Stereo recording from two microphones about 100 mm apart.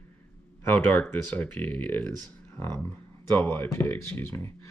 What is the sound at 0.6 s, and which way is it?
Speech, 15° left (ahead or behind).